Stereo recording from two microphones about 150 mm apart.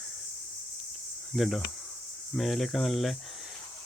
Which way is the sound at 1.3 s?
Centre (ahead or behind).